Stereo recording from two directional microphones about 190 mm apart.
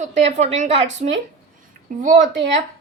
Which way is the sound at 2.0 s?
40° right (ahead or behind).